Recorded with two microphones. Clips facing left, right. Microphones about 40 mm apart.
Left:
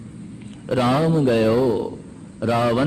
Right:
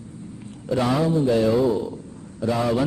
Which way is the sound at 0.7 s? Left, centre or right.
Left.